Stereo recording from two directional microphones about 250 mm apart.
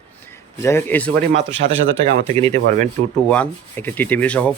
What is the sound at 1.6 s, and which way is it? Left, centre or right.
Speech, right.